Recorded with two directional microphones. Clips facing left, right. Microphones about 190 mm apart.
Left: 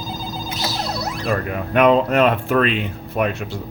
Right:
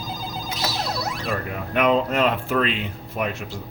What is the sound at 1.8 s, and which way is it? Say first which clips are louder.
Speech: left 5 dB; 65° left (ahead or behind).